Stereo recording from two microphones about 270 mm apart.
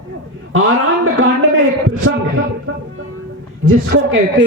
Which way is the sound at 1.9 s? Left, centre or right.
Right.